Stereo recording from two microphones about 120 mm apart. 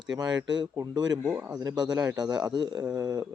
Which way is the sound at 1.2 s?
15° right (ahead or behind).